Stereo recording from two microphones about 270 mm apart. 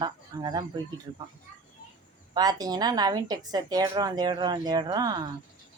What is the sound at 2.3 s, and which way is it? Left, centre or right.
A woman's voice, centre.